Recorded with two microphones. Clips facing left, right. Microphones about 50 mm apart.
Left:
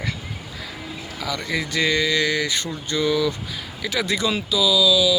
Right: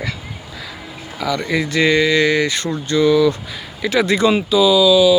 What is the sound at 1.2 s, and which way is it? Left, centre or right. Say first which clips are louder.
Speech: right 7 dB; right.